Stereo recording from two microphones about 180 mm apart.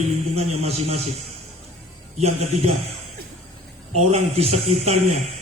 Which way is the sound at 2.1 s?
40° right (ahead or behind).